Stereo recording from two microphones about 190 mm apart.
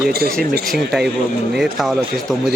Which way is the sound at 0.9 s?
Centre (ahead or behind).